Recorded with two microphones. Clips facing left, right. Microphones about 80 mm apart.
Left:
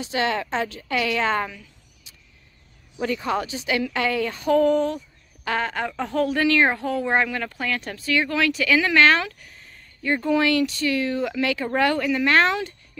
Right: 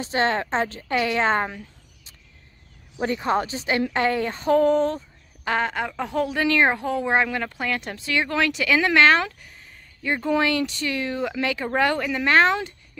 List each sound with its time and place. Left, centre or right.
0.0 s speech: right
5.5 s speech: right
5.8 s a woman's voice: centre
6.1 s speech: right